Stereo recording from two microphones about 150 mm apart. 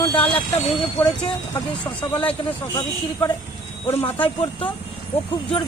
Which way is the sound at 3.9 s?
15° left (ahead or behind).